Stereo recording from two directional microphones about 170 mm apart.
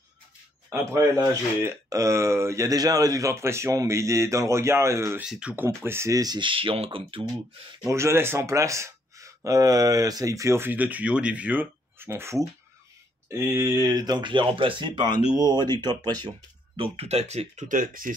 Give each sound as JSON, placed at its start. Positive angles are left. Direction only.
{"t": 0.7, "sound": "speech", "side_deg": -15}
{"t": 5.2, "sound": "speech", "side_deg": -5}
{"t": 7.8, "sound": "speech", "side_deg": -15}
{"t": 16.7, "sound": "speech", "side_deg": -35}